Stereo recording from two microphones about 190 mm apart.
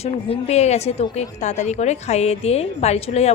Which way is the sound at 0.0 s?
35° left (ahead or behind).